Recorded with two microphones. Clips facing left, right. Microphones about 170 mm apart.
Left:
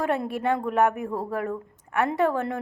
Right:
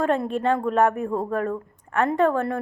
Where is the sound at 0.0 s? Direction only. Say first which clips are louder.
Right 3 dB; 15° left (ahead or behind).